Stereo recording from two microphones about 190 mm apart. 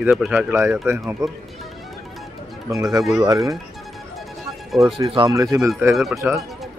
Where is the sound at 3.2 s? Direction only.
20° right (ahead or behind).